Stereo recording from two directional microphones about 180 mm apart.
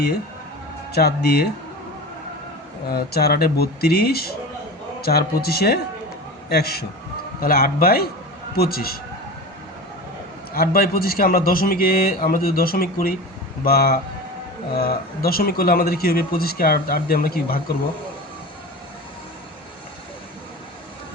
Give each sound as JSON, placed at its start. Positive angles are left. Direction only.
{"t": 0.9, "sound": "speech", "side_deg": 60}
{"t": 2.9, "sound": "speech", "side_deg": 60}
{"t": 10.5, "sound": "speech", "side_deg": 55}